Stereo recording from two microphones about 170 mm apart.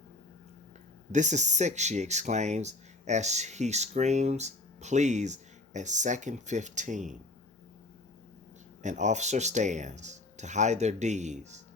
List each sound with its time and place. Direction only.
1.1 s speech: 45° right (ahead or behind)
8.8 s speech: 45° right (ahead or behind)